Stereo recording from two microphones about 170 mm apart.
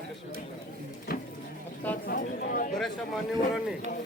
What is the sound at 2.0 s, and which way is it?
Speech, 60° left (ahead or behind).